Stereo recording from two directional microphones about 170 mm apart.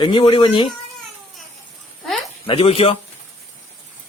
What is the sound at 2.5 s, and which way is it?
Speech, 35° left (ahead or behind).